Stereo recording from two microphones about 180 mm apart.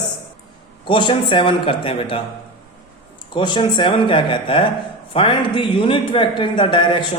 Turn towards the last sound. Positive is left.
turn(degrees=25)  # may be behind; listen again after turning